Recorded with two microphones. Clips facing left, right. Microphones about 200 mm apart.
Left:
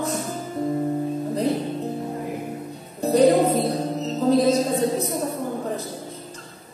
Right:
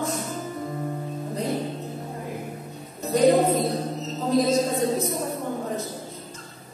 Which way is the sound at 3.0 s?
35° left (ahead or behind).